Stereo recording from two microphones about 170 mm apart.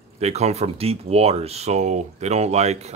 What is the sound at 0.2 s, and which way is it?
Speech, 40° right (ahead or behind).